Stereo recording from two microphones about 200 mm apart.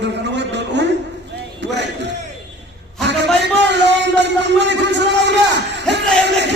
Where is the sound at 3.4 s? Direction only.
60° right (ahead or behind).